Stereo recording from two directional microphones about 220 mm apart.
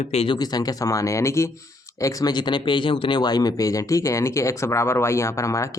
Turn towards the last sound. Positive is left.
turn(degrees=15)  # may be behind; listen again after turning